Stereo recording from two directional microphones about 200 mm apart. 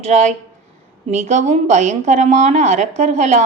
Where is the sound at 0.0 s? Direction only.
35° right (ahead or behind).